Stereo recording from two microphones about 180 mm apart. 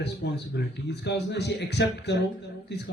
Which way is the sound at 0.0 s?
70° left (ahead or behind).